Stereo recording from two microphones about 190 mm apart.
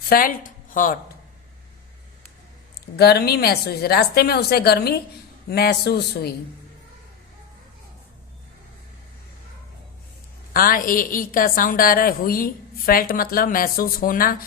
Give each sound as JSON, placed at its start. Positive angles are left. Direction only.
{"t": 0.1, "sound": "a woman's voice", "side_deg": 45}
{"t": 2.9, "sound": "a woman's voice", "side_deg": 55}
{"t": 10.5, "sound": "a woman's voice", "side_deg": 50}